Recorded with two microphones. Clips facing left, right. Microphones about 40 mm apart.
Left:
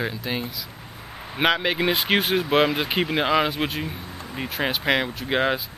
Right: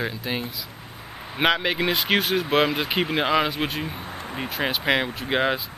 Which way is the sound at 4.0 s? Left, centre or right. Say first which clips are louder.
Right 3 dB; right.